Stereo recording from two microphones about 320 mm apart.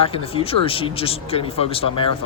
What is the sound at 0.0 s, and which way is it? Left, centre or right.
Speech, centre.